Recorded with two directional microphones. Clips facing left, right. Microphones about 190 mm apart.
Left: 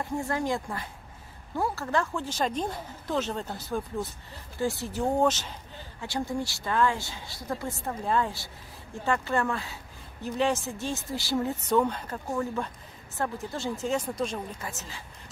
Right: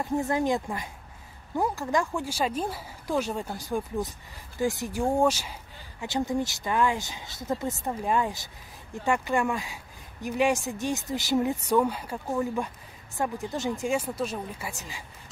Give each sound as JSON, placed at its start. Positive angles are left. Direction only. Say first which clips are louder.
{"t": 0.0, "sound": "speech", "louder": "right 4 dB", "side_deg": -20}